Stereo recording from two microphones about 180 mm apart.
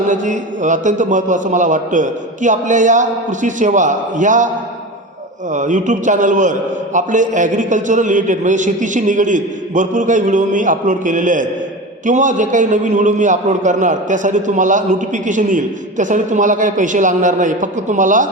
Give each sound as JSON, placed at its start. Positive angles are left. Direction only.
{"t": 0.1, "sound": "a man's voice", "side_deg": -45}
{"t": 5.5, "sound": "a man's voice", "side_deg": -45}